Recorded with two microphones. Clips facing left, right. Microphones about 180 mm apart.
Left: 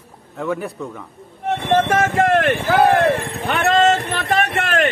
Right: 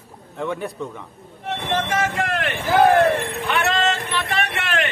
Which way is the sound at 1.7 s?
50° left (ahead or behind).